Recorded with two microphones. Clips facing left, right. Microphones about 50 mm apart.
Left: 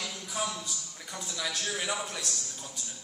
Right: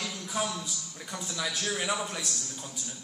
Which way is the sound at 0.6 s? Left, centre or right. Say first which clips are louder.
Right 2 dB; centre.